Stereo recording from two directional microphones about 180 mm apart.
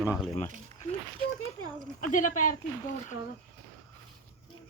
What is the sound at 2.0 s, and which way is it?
Speech, 45° left (ahead or behind).